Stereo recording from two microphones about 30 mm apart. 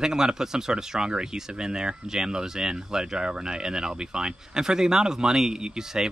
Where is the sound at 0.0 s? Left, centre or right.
Centre.